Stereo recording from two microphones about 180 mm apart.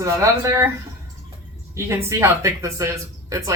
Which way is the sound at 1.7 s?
15° right (ahead or behind).